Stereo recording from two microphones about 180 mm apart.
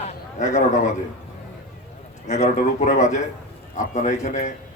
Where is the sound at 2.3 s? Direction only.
40° left (ahead or behind).